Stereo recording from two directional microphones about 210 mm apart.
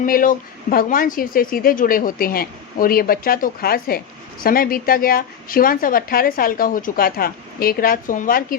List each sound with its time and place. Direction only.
0.0 s a woman's voice: 40° left (ahead or behind)